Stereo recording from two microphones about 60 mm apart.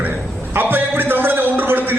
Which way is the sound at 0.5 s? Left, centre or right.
Right.